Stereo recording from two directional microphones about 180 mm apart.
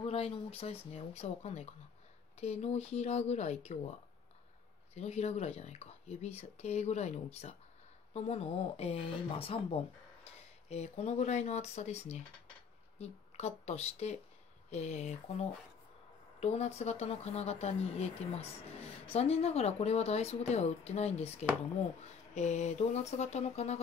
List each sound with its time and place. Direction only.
0.0 s speech: 35° left (ahead or behind)
4.9 s speech: 35° left (ahead or behind)